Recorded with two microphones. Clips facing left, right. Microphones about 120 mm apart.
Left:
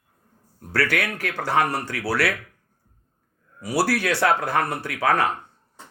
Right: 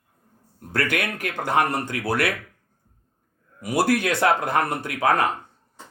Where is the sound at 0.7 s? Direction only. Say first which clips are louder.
Left 1 dB; 20° right (ahead or behind).